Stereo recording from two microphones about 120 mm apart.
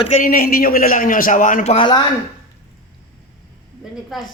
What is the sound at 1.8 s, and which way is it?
Speech, 40° left (ahead or behind).